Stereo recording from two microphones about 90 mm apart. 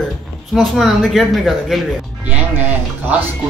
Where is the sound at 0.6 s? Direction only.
Centre (ahead or behind).